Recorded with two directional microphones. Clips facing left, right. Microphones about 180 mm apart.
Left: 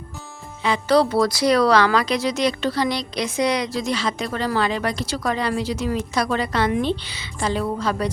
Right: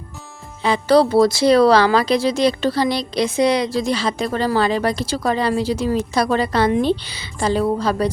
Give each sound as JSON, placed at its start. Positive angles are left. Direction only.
{"t": 0.6, "sound": "speech", "side_deg": -35}